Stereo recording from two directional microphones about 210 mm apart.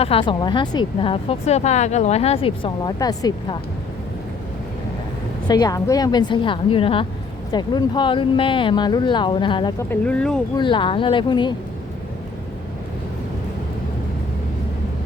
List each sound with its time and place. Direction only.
0.0 s speech: 25° left (ahead or behind)
5.5 s speech: 20° left (ahead or behind)
9.9 s speech: 5° left (ahead or behind)
10.6 s speech: 25° left (ahead or behind)